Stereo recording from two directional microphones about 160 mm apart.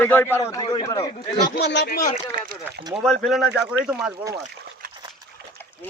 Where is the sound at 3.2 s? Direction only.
Centre (ahead or behind).